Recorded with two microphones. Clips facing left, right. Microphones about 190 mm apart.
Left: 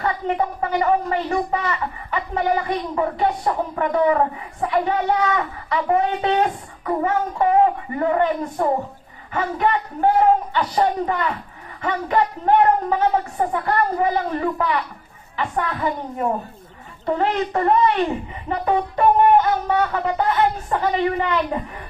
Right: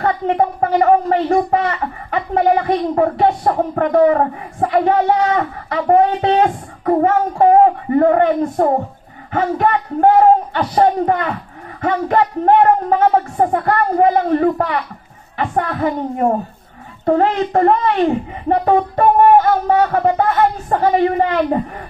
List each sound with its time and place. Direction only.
0.0 s a man's voice: 50° right (ahead or behind)